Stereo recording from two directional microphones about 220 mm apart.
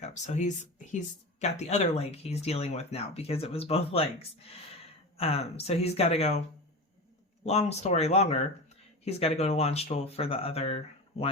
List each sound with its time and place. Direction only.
0.0 s speech: 30° left (ahead or behind)
7.4 s speech: 30° left (ahead or behind)